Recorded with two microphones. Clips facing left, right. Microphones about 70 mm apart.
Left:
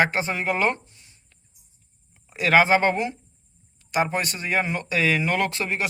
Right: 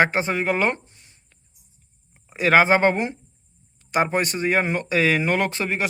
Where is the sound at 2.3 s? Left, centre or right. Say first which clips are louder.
Right 1 dB; right.